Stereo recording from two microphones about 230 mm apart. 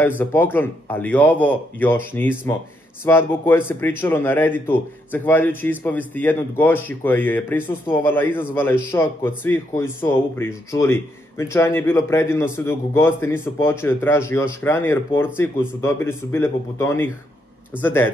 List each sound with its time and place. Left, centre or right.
0.2 s a man's voice: centre